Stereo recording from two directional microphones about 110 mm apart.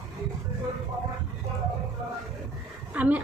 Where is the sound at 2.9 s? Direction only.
15° right (ahead or behind).